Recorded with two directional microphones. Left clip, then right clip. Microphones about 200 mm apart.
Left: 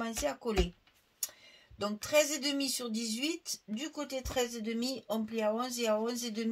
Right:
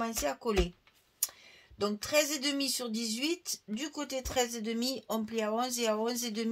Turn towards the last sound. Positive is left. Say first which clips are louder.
# right 1 dB
turn(degrees=-40)  # may be behind; listen again after turning